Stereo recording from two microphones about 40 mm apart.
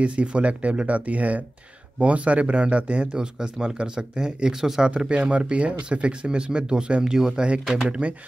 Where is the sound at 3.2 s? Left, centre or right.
Centre.